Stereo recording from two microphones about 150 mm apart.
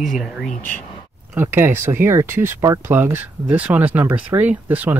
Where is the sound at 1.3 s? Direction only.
15° right (ahead or behind).